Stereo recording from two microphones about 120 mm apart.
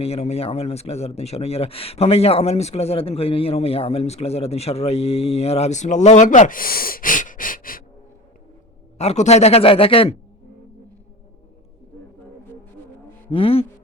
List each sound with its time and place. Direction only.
0.0 s speech: 60° left (ahead or behind); by 6.5 s 90° left
7.1 s a sound: 90° left
9.0 s speech: 65° left (ahead or behind); by 10.2 s 50° left (ahead or behind)
13.3 s speech: 50° left (ahead or behind)